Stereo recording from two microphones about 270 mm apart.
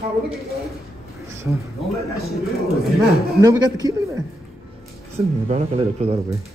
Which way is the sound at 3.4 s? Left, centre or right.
Centre.